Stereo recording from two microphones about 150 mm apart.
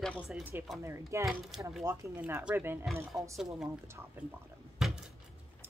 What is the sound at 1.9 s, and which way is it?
Speech, 20° right (ahead or behind).